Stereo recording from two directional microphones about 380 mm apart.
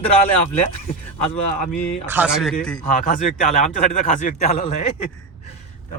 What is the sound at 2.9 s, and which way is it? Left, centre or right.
Speech, left.